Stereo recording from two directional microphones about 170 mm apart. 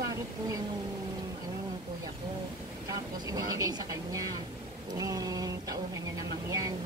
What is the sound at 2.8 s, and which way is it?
Speech, 20° right (ahead or behind).